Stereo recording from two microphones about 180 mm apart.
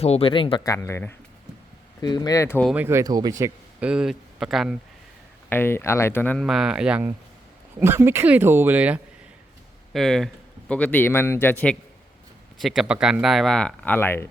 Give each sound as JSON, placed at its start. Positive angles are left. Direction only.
{"t": 0.0, "sound": "speech", "side_deg": 35}
{"t": 2.6, "sound": "speech", "side_deg": -10}
{"t": 5.5, "sound": "speech", "side_deg": 10}
{"t": 6.4, "sound": "speech", "side_deg": 0}
{"t": 9.9, "sound": "speech", "side_deg": 0}
{"t": 12.5, "sound": "speech", "side_deg": 0}